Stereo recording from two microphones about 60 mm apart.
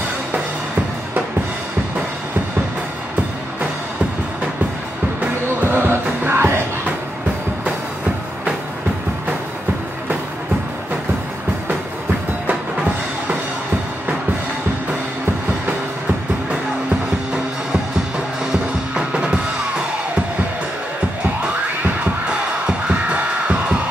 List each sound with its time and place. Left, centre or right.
5.2 s music: right
18.5 s music: centre
22.7 s music: centre